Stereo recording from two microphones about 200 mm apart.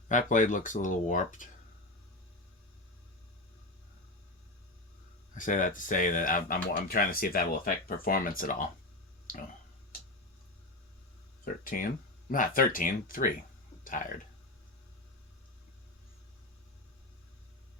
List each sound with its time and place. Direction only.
0.1 s speech: 40° left (ahead or behind)
5.3 s speech: 40° left (ahead or behind)
11.6 s speech: 45° left (ahead or behind)